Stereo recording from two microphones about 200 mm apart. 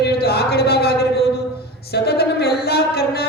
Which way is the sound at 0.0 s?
55° left (ahead or behind).